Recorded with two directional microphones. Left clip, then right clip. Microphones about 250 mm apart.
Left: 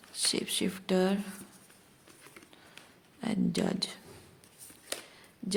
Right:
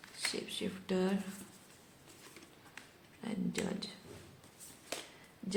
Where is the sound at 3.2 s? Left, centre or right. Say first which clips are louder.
Left 7 dB; left.